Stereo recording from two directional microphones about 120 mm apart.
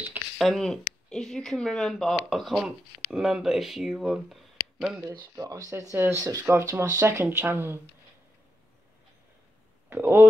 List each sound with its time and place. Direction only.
0.4 s speech: centre (ahead or behind)
5.3 s speech: 25° right (ahead or behind)
9.8 s speech: 20° right (ahead or behind)